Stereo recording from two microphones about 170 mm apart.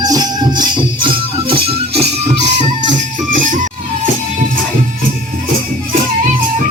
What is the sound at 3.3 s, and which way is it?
Music, 50° right (ahead or behind).